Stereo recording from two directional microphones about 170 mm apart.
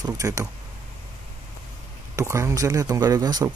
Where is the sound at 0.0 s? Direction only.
20° right (ahead or behind).